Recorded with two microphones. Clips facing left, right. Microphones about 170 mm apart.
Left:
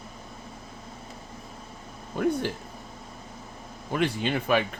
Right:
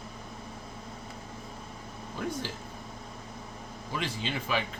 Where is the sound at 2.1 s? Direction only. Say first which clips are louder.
Left 10 dB; 55° left (ahead or behind).